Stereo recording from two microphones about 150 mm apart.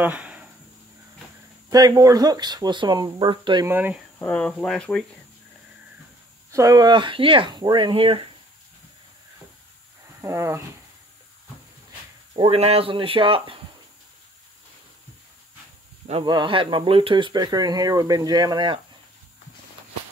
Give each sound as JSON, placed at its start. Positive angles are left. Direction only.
{"t": 0.0, "sound": "a sound", "side_deg": -10}
{"t": 1.7, "sound": "speech", "side_deg": -25}
{"t": 3.6, "sound": "speech", "side_deg": -10}
{"t": 4.2, "sound": "speech", "side_deg": 10}
{"t": 6.5, "sound": "speech", "side_deg": -25}
{"t": 10.2, "sound": "speech", "side_deg": -20}
{"t": 12.4, "sound": "speech", "side_deg": -40}
{"t": 16.1, "sound": "speech", "side_deg": -35}